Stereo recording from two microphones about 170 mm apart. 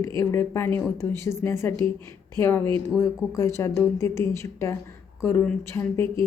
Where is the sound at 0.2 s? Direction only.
15° left (ahead or behind).